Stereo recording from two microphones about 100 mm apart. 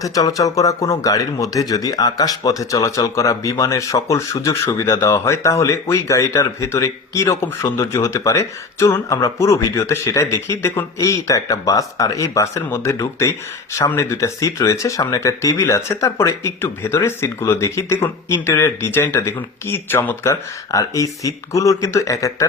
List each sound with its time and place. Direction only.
0.0 s speech: 35° left (ahead or behind)